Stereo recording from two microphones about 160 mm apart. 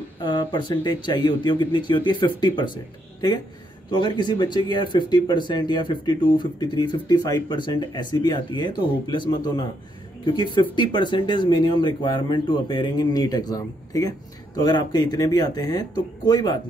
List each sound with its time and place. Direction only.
0.2 s speech: 30° left (ahead or behind)
3.9 s speech: 30° left (ahead or behind)